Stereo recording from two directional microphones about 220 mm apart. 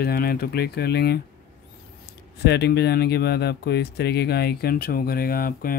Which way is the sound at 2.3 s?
50° left (ahead or behind).